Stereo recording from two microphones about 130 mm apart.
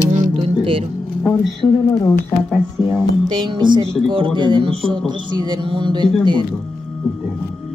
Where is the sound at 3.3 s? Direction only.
35° right (ahead or behind).